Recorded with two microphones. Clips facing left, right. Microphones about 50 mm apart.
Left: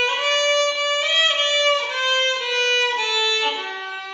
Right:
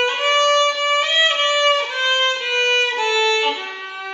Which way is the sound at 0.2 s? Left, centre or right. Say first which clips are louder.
Right 7 dB; centre.